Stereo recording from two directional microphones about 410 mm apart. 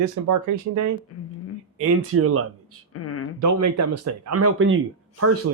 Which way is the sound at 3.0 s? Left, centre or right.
Left.